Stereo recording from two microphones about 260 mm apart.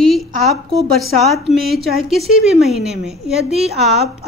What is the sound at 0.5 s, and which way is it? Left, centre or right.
A woman's voice, centre.